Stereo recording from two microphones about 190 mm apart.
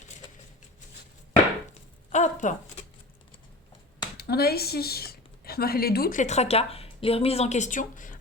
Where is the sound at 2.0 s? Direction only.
40° left (ahead or behind).